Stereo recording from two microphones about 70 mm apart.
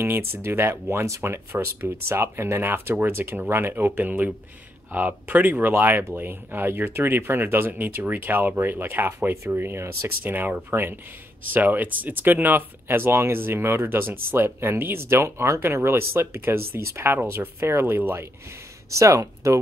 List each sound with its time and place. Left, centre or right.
0.0 s speech: right
18.9 s speech: right